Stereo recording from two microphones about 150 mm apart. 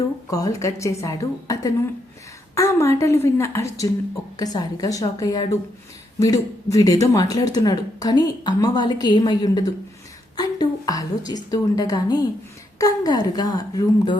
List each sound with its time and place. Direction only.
0.3 s speech: 25° left (ahead or behind)
10.3 s a sound: 25° left (ahead or behind)
11.5 s speech: 25° left (ahead or behind)